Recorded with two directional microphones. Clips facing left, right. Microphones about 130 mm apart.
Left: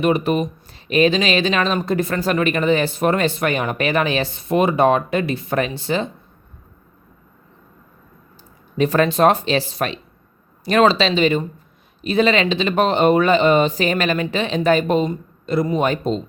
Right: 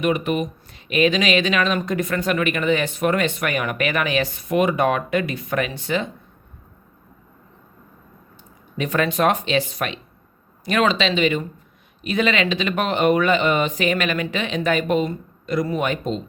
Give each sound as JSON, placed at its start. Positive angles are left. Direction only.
{"t": 0.0, "sound": "speech", "side_deg": 35}
{"t": 8.8, "sound": "speech", "side_deg": 35}